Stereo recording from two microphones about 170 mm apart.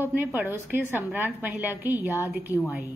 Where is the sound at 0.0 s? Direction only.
10° right (ahead or behind).